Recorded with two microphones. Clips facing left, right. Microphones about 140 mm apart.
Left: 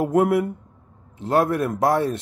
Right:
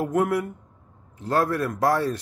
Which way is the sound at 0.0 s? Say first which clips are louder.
Left 4 dB; 25° left (ahead or behind).